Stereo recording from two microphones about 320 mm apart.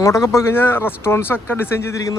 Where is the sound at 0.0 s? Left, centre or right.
Centre.